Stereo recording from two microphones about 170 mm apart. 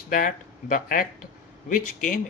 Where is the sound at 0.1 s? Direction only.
50° left (ahead or behind).